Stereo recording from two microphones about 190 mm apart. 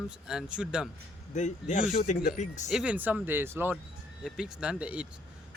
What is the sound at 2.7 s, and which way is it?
Speech, 5° right (ahead or behind).